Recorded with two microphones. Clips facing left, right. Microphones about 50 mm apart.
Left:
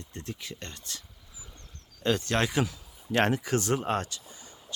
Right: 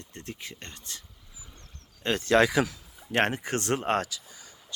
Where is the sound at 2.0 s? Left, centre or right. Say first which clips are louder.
Left 2 dB; right.